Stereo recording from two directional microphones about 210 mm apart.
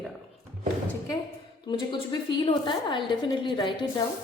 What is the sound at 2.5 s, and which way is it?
A woman's voice, 25° left (ahead or behind).